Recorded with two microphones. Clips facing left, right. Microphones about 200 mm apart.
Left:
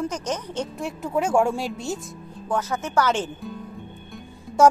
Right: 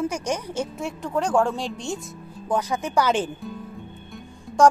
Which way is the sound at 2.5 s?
15° right (ahead or behind).